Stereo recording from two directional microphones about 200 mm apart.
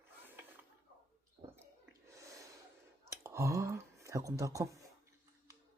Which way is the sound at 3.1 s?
15° right (ahead or behind).